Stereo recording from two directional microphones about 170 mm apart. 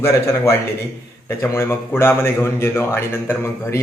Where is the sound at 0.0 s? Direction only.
15° left (ahead or behind).